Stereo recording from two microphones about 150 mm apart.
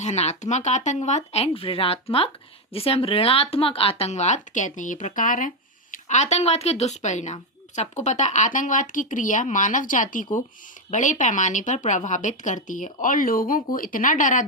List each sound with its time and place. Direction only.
0.0 s speech: 50° left (ahead or behind)